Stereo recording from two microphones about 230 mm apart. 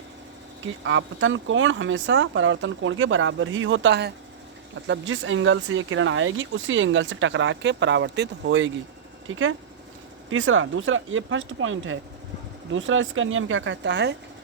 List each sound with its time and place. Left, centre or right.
0.6 s speech: right